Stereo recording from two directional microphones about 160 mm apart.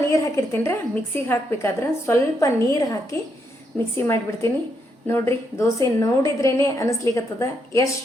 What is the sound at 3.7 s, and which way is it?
Speech, 5° left (ahead or behind).